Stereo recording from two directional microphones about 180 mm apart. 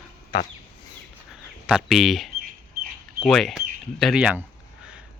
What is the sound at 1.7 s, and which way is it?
Speech, centre (ahead or behind).